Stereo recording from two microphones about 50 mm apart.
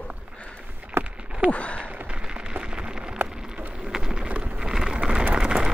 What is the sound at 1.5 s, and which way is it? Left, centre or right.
Sigh, left.